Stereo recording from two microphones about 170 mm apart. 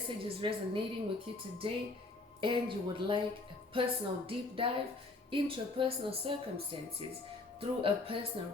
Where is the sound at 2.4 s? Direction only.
30° right (ahead or behind).